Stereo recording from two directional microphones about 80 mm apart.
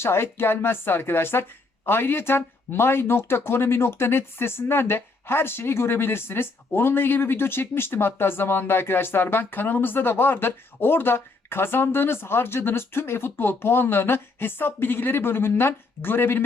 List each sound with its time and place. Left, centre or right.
0.0 s a woman's voice: left